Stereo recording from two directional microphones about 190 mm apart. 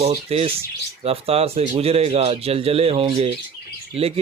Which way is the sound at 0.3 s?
30° right (ahead or behind).